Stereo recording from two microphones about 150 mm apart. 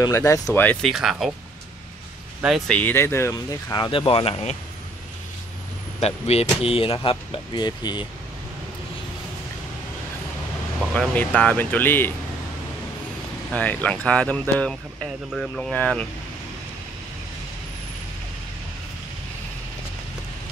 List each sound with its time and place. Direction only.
0.0 s speech: 20° left (ahead or behind)
0.8 s speech: centre (ahead or behind)
2.7 s speech: 10° left (ahead or behind); by 4.6 s 45° left (ahead or behind)
5.9 s speech: 45° left (ahead or behind)
10.9 s speech: 10° left (ahead or behind)
13.5 s speech: 10° left (ahead or behind)